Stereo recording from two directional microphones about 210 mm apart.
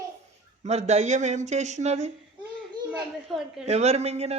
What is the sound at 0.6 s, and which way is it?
Speech, 30° right (ahead or behind).